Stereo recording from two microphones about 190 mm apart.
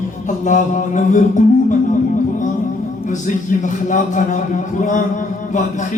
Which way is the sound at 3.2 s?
40° left (ahead or behind).